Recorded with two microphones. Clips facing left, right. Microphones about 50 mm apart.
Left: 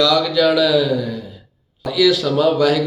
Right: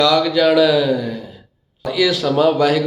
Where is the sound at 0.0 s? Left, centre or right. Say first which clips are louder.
Right 1 dB; right.